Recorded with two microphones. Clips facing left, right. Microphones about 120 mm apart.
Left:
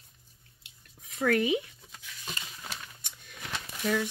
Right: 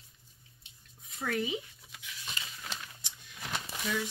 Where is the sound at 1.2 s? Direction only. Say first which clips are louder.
Left 8 dB; 70° left (ahead or behind).